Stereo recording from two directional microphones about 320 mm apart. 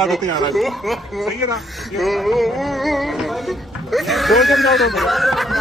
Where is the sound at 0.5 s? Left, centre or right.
Centre.